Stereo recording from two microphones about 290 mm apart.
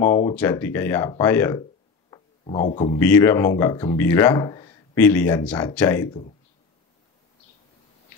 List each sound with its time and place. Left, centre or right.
0.0 s speech: centre
2.0 s a sound: centre
3.0 s speech: centre